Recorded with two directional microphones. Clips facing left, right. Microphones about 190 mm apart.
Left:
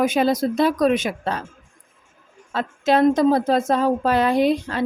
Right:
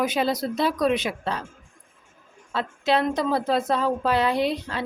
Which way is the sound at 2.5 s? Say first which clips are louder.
Left 4 dB; 45° left (ahead or behind).